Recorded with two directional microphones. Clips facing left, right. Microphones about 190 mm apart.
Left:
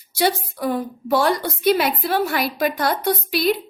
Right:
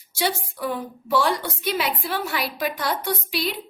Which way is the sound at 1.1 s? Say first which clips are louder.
Left 3 dB; 45° left (ahead or behind).